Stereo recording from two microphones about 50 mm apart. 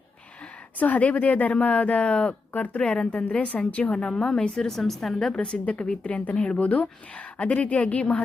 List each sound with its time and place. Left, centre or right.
0.8 s a woman's voice: left; by 5.3 s centre
5.6 s a woman's voice: left